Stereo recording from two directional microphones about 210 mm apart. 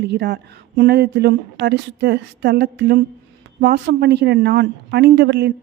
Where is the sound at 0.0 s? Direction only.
50° right (ahead or behind).